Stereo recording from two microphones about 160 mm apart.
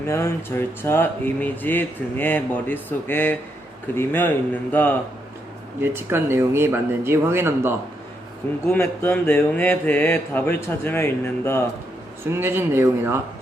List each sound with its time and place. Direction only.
0.1 s speech: 15° left (ahead or behind)
5.8 s speech: 15° right (ahead or behind)
8.6 s speech: 15° left (ahead or behind)
12.3 s speech: 15° right (ahead or behind)